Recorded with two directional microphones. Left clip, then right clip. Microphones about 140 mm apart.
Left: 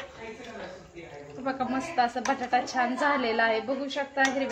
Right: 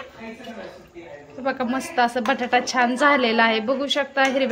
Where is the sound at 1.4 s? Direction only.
40° right (ahead or behind).